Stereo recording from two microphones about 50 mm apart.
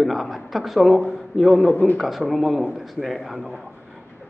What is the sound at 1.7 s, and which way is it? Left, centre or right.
Speech, left.